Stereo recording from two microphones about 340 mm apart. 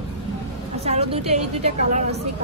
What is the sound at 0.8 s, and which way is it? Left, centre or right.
A woman's voice, centre.